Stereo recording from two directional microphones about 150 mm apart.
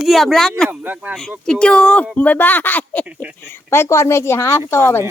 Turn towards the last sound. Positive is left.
turn(degrees=15)  # may be behind; listen again after turning